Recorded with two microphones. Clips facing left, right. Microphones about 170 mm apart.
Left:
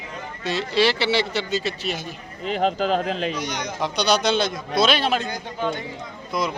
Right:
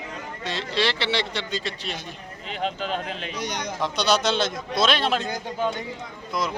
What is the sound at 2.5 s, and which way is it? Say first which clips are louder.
Speech: left 7 dB; 40° left (ahead or behind).